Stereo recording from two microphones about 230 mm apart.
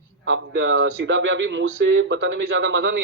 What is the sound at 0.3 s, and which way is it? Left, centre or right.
A man's voice, right.